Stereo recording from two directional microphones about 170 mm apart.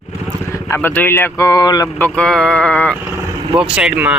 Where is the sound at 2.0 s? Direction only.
5° left (ahead or behind).